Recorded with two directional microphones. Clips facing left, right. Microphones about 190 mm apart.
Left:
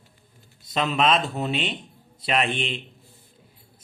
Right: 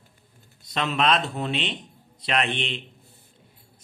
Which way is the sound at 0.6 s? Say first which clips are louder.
Left 2 dB; centre (ahead or behind).